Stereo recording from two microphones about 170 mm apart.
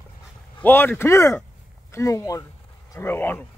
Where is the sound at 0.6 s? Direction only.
10° left (ahead or behind).